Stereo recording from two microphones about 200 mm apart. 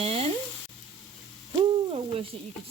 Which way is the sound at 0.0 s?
30° right (ahead or behind).